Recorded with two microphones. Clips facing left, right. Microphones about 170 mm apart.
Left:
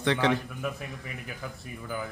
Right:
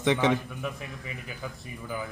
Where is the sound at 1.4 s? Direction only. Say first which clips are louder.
Right 2 dB; 10° right (ahead or behind).